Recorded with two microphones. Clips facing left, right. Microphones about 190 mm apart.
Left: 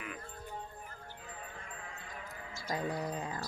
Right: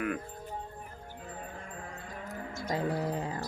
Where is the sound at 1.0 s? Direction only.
45° right (ahead or behind).